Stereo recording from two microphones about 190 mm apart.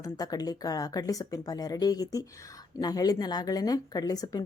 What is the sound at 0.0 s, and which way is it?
Speech, 20° left (ahead or behind).